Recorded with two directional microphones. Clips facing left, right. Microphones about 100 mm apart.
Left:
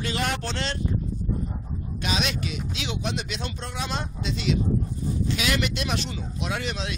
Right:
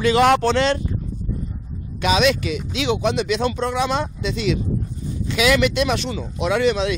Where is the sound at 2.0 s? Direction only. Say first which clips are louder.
Right 11 dB; 90° right.